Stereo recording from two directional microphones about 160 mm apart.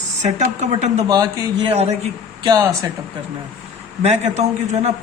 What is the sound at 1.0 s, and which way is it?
Speech, 25° right (ahead or behind).